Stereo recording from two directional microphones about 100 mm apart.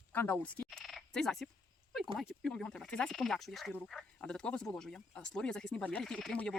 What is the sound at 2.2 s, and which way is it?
Speech, centre (ahead or behind).